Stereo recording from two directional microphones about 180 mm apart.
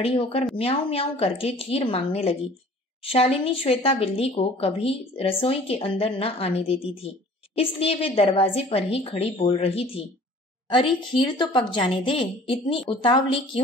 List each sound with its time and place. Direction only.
0.0 s a woman's voice: 30° left (ahead or behind)